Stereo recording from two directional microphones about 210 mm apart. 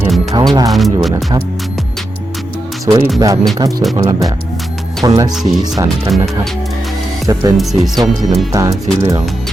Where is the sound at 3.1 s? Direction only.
15° right (ahead or behind).